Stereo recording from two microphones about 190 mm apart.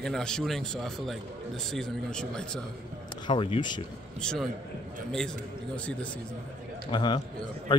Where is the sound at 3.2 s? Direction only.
25° left (ahead or behind).